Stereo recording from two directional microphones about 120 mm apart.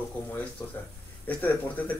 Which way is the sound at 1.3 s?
15° left (ahead or behind).